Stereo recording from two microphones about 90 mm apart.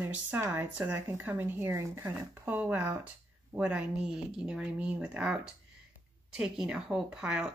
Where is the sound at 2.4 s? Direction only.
15° right (ahead or behind).